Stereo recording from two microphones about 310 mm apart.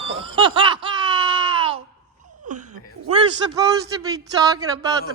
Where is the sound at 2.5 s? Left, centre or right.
Right.